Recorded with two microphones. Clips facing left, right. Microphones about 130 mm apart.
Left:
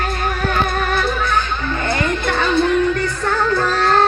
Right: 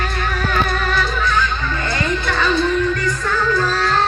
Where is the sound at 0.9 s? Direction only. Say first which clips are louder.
Left 1 dB; 55° left (ahead or behind).